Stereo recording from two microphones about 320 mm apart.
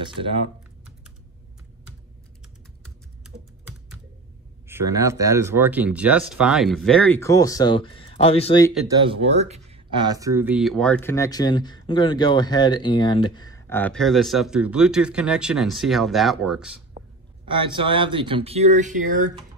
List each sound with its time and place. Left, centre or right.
4.6 s speech: centre
8.7 s speech: centre
17.0 s a sound: right
17.5 s speech: centre